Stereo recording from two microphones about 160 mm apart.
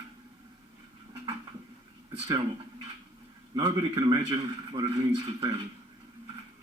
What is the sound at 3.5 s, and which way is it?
A man's voice, 30° right (ahead or behind).